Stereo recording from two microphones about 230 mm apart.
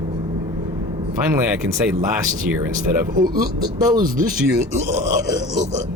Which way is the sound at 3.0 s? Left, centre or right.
Centre.